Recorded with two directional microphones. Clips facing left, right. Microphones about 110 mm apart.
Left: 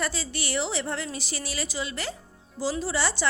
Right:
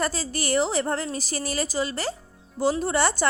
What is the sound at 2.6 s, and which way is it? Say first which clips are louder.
Speech: right 5 dB; 50° right (ahead or behind).